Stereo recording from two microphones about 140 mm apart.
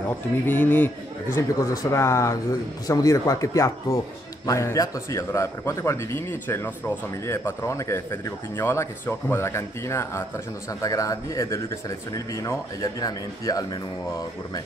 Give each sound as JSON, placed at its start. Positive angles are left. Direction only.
{"t": 0.5, "sound": "a man's voice", "side_deg": 15}
{"t": 1.6, "sound": "speech", "side_deg": 25}